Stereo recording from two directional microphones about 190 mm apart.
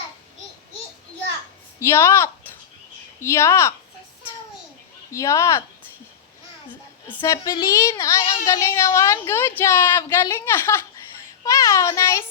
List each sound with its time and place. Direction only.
1.8 s a woman's voice: 10° left (ahead or behind)
5.1 s a woman's voice: 15° left (ahead or behind)
6.7 s a woman's voice: 10° left (ahead or behind)